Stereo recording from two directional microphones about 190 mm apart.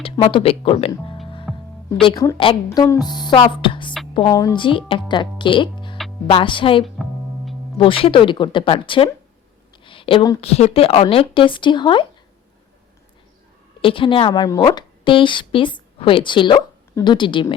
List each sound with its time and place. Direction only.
0.0 s speech: 30° left (ahead or behind)
1.5 s music: centre (ahead or behind)
2.0 s speech: 25° left (ahead or behind)
6.8 s music: centre (ahead or behind)
7.8 s speech: 30° left (ahead or behind)
13.8 s a woman's voice: 25° left (ahead or behind)